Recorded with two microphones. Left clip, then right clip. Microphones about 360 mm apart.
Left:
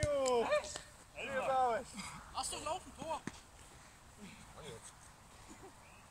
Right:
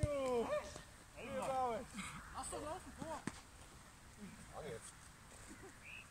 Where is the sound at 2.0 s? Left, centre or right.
Centre.